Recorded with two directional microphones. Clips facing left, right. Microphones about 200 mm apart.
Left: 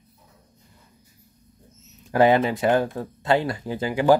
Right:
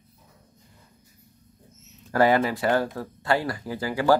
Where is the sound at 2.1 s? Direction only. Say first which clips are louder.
Left 3 dB; 20° left (ahead or behind).